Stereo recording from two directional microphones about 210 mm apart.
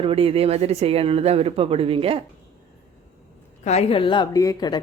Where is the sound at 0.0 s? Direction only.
25° right (ahead or behind).